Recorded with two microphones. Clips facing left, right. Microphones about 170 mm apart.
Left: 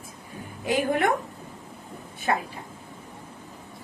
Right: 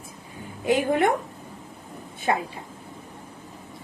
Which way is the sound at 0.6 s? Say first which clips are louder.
Right 3 dB; 20° right (ahead or behind).